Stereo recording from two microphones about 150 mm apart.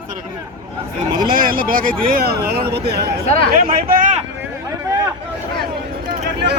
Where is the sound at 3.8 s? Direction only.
65° right (ahead or behind).